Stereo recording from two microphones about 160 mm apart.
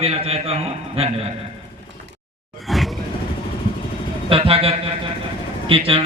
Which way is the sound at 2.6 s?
Centre (ahead or behind).